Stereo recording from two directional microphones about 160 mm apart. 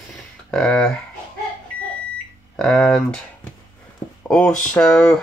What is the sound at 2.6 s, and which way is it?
Speech, centre (ahead or behind).